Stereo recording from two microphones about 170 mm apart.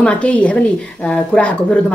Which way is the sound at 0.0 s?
5° left (ahead or behind).